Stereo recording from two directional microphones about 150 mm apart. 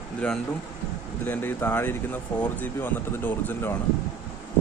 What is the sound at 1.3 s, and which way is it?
Speech, 15° left (ahead or behind).